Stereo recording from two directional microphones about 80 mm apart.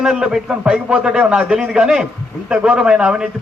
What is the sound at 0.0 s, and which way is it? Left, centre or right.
A man's voice, centre.